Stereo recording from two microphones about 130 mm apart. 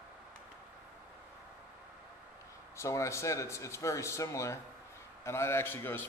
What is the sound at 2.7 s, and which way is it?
A man's voice, 20° left (ahead or behind).